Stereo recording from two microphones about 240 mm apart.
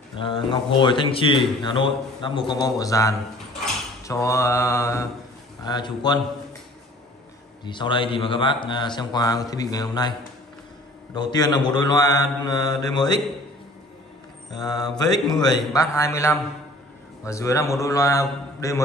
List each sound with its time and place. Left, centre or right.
0.2 s a man's voice: centre
4.0 s mantra: centre
7.6 s a man's voice: centre
11.1 s mantra: centre
14.5 s mantra: centre